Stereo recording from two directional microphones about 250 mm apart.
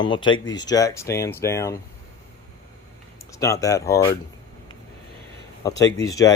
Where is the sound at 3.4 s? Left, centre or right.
Centre.